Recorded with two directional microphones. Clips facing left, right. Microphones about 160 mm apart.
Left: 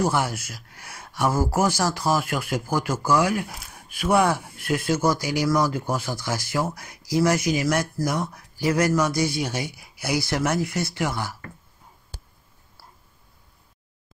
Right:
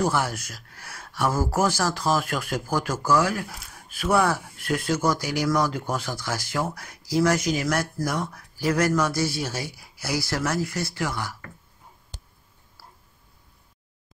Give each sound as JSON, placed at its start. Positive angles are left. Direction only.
{"t": 0.0, "sound": "speech", "side_deg": 10}